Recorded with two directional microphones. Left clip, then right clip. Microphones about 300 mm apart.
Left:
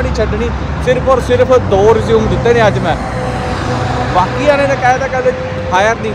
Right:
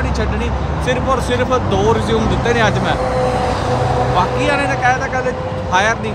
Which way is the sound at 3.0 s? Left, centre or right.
Right.